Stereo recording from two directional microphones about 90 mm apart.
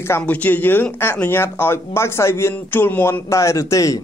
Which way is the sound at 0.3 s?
20° left (ahead or behind).